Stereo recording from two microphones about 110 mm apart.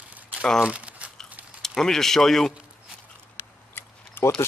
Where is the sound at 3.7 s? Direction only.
20° left (ahead or behind).